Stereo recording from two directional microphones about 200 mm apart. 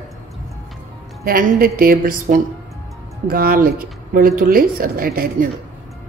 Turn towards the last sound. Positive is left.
turn(degrees=-45)  # may be behind; listen again after turning